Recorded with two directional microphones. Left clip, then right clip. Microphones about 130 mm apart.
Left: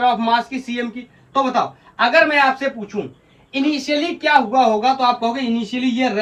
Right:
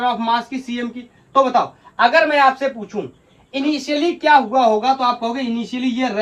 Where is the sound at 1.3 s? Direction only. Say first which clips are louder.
Right 3 dB; 25° right (ahead or behind).